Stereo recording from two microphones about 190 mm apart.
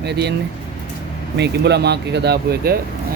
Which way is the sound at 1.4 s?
60° right (ahead or behind).